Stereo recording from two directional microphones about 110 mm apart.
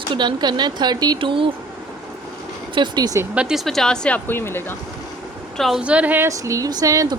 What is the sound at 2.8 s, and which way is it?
Speech, 35° right (ahead or behind).